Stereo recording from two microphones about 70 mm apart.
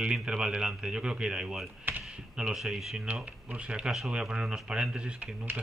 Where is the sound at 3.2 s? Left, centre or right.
Centre.